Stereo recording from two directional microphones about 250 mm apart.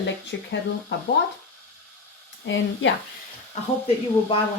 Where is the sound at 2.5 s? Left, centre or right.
Left.